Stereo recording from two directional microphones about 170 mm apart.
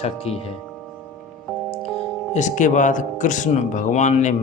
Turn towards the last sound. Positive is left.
turn(degrees=45)  # may be behind; listen again after turning